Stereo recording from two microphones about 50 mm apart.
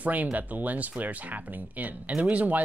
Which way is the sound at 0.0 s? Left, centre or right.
Right.